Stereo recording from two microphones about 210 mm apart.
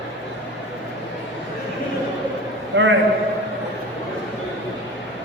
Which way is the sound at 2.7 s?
60° right (ahead or behind).